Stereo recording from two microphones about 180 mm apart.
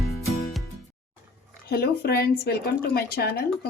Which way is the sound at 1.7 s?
60° left (ahead or behind).